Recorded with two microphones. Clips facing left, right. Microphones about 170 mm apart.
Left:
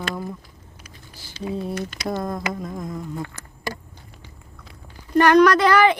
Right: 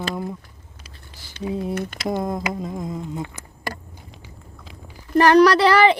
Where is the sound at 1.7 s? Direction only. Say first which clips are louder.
Right 2 dB; 55° right (ahead or behind).